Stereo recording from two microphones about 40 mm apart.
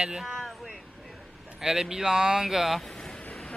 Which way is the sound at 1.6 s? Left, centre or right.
Centre.